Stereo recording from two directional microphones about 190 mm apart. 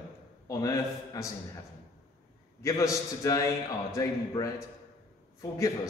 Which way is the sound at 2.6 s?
15° left (ahead or behind).